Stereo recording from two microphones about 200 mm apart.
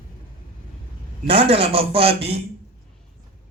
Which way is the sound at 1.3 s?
30° right (ahead or behind).